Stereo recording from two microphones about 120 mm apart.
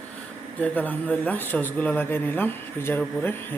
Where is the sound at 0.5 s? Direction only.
15° left (ahead or behind).